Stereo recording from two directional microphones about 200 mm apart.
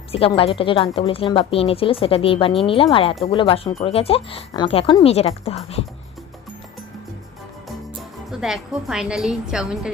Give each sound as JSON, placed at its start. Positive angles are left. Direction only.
{"t": 0.1, "sound": "a woman's voice", "side_deg": 25}
{"t": 8.3, "sound": "a woman's voice", "side_deg": 0}